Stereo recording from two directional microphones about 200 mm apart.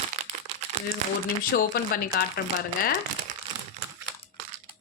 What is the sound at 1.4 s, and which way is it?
Speech, 45° left (ahead or behind).